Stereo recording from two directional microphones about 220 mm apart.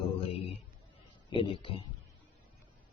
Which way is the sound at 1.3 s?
25° left (ahead or behind).